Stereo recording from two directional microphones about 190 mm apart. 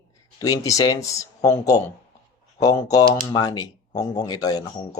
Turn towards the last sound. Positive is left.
turn(degrees=20)  # may be behind; listen again after turning